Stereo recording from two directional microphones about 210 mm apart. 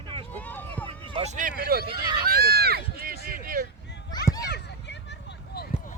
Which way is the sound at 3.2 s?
45° right (ahead or behind).